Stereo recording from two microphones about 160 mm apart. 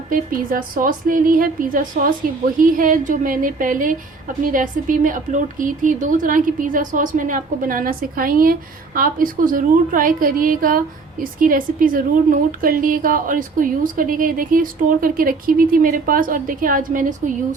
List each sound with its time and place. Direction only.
0.1 s a woman's voice: 60° right (ahead or behind)